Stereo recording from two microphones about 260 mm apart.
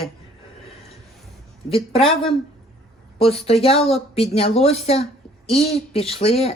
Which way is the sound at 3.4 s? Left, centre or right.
Left.